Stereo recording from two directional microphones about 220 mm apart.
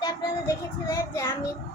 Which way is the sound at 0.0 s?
15° left (ahead or behind).